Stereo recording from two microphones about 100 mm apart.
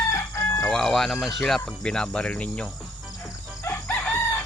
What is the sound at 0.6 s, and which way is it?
Speech, 5° left (ahead or behind).